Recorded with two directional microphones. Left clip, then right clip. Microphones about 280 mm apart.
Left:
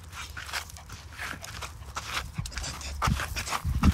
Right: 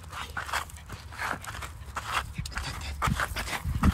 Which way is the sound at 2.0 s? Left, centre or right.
Centre.